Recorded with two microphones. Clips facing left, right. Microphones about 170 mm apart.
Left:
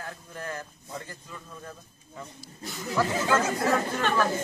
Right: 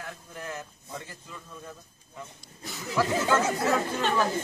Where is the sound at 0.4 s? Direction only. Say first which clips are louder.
Left 2 dB; 5° right (ahead or behind).